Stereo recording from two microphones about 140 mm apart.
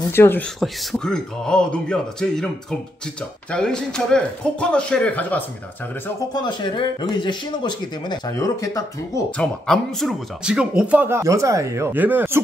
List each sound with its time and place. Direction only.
0.1 s speech: 15° left (ahead or behind)
0.6 s speech: 5° left (ahead or behind)
3.5 s speech: 5° left (ahead or behind)
6.3 s speech: 35° left (ahead or behind)
9.4 s speech: 5° left (ahead or behind); by 12.4 s 15° right (ahead or behind)